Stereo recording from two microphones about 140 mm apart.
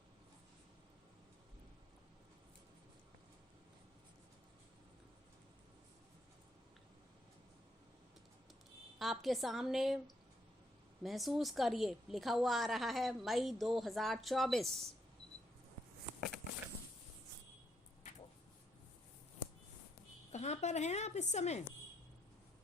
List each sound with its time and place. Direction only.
9.0 s a woman's voice: centre (ahead or behind)
11.0 s a woman's voice: centre (ahead or behind)
20.3 s a woman's voice: 50° left (ahead or behind)